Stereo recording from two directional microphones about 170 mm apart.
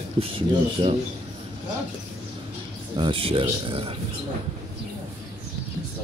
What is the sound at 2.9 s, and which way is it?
A man's voice, 30° right (ahead or behind).